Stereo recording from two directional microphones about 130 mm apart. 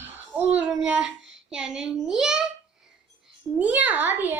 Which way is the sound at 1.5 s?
5° right (ahead or behind).